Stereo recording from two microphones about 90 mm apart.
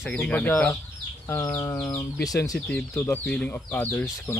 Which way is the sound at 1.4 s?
45° left (ahead or behind).